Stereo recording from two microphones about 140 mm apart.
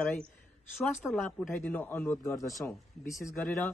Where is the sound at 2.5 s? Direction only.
Centre (ahead or behind).